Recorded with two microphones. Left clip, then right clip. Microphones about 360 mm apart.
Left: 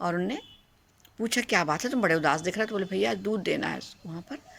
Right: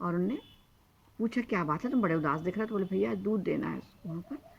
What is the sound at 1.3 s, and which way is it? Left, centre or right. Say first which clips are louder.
Speech: left 7 dB; left.